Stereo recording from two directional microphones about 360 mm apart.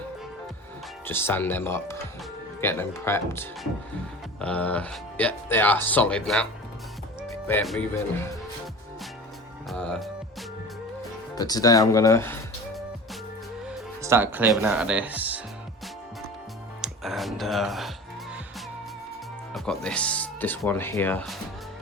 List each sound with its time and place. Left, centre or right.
1.0 s speech: centre
9.6 s music: centre
11.3 s speech: centre
13.7 s speech: centre
16.8 s music: centre
19.5 s speech: centre